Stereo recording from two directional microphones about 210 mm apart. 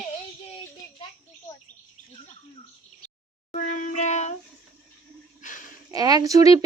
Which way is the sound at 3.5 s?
40° left (ahead or behind).